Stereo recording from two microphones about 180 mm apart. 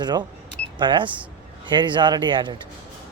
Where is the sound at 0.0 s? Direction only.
25° right (ahead or behind).